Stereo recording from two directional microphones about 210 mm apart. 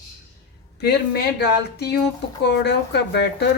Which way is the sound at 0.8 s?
50° left (ahead or behind).